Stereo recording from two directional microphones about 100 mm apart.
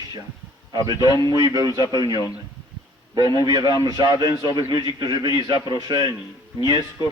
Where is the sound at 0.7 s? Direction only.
40° right (ahead or behind).